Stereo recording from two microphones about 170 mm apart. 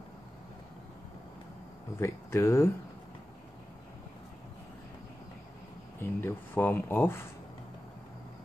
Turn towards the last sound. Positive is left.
turn(degrees=10)  # may be behind; listen again after turning